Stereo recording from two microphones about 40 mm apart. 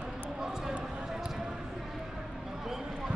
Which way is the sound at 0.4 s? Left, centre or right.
Centre.